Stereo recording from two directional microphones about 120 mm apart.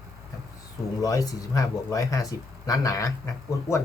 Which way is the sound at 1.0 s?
30° left (ahead or behind).